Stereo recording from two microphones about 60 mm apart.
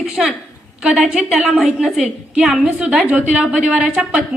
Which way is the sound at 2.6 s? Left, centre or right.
Centre.